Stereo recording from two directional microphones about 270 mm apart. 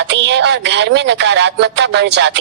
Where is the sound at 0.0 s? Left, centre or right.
Right.